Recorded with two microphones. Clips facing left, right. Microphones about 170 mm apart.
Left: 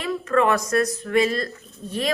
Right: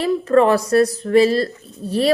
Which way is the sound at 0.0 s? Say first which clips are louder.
Right 6 dB; 35° right (ahead or behind).